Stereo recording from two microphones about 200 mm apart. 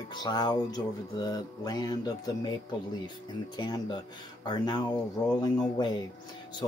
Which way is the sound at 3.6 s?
20° left (ahead or behind).